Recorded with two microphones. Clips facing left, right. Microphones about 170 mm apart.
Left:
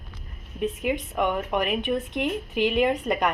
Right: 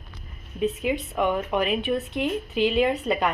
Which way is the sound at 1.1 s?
5° right (ahead or behind).